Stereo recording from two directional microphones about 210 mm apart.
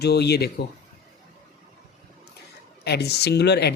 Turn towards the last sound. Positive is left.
turn(degrees=50)  # may be behind; listen again after turning